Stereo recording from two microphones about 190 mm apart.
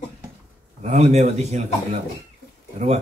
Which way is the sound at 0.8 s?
35° right (ahead or behind).